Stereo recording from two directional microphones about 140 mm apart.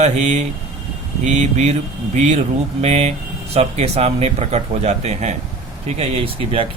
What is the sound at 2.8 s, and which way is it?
Speech, 50° right (ahead or behind).